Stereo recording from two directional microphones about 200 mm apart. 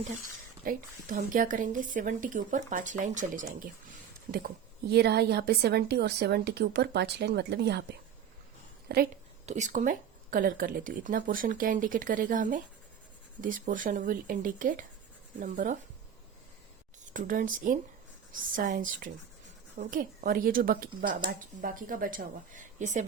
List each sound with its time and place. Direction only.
0.6 s a woman's voice: 45° right (ahead or behind)
9.5 s speech: 35° right (ahead or behind)
17.2 s speech: 40° right (ahead or behind)